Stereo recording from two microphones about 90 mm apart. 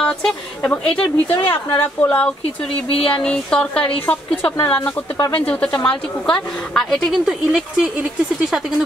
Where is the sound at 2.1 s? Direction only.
15° left (ahead or behind).